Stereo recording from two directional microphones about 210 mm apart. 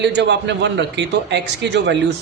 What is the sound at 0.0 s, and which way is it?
A man's voice, 55° right (ahead or behind).